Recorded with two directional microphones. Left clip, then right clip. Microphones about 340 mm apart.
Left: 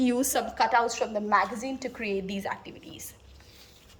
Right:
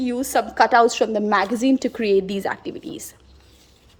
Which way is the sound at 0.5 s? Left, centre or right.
Centre.